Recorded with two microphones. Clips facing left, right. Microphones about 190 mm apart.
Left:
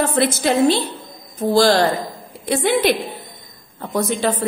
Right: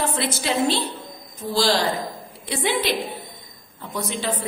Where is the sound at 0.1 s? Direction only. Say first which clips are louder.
Left 7 dB; 50° left (ahead or behind).